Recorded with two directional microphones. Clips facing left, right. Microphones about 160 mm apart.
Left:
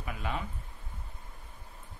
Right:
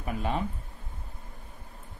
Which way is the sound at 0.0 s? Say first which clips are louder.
Right 5 dB; 40° right (ahead or behind).